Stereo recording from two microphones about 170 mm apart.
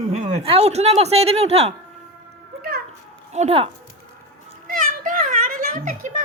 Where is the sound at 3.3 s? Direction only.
35° right (ahead or behind).